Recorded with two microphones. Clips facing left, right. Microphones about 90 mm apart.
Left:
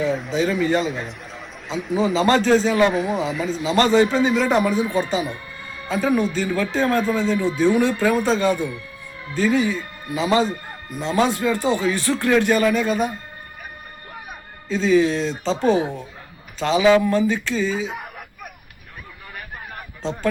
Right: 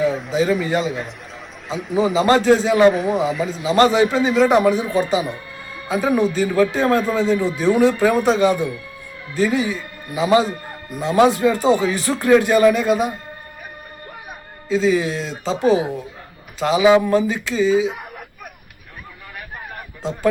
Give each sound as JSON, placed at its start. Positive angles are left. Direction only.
{"t": 0.0, "sound": "a man's voice", "side_deg": 0}
{"t": 6.8, "sound": "speech", "side_deg": -25}
{"t": 7.2, "sound": "speech", "side_deg": -15}
{"t": 11.1, "sound": "speech", "side_deg": -20}
{"t": 14.7, "sound": "speech", "side_deg": -5}